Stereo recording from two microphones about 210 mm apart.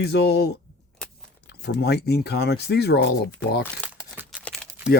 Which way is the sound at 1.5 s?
50° left (ahead or behind).